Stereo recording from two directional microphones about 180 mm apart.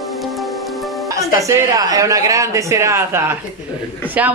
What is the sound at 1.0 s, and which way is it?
A woman's voice, 20° right (ahead or behind).